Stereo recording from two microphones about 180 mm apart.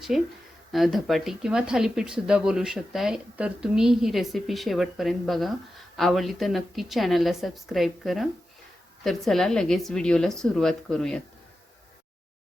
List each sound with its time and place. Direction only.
0.1 s speech: centre (ahead or behind)